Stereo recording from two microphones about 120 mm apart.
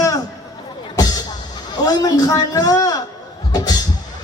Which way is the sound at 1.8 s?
30° left (ahead or behind).